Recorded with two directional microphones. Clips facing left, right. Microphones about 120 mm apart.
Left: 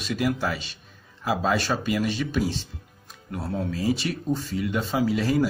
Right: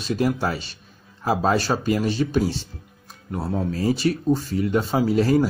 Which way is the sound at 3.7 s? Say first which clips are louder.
Right 5 dB; 45° right (ahead or behind).